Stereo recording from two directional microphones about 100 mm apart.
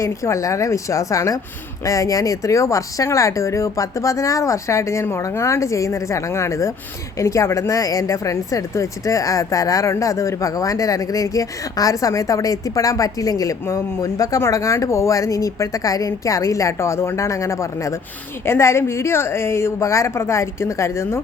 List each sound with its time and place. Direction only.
0.0 s a woman's voice: 30° left (ahead or behind)